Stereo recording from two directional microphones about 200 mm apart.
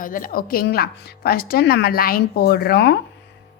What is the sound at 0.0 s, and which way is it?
Speech, 45° left (ahead or behind).